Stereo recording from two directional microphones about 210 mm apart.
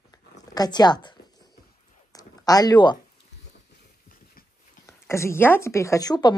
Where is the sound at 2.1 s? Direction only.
15° left (ahead or behind).